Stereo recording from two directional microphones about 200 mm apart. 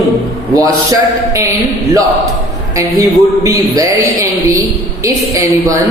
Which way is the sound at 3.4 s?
15° right (ahead or behind).